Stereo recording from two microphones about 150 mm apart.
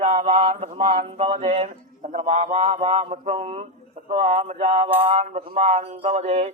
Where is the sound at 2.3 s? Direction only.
55° right (ahead or behind).